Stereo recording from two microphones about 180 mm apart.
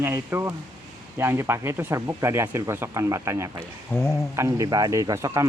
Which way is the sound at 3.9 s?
15° left (ahead or behind).